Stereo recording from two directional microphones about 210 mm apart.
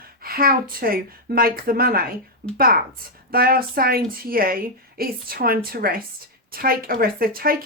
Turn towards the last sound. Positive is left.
turn(degrees=-45)  # may be behind; listen again after turning